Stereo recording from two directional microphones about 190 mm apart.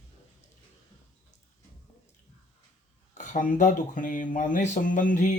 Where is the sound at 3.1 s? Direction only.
40° left (ahead or behind).